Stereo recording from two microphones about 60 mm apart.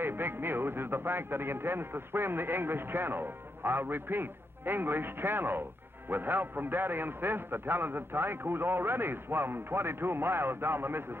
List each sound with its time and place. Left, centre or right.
0.0 s a man's voice: right